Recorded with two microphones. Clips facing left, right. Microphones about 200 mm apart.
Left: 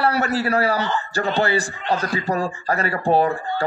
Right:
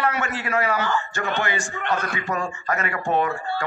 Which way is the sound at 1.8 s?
60° right (ahead or behind).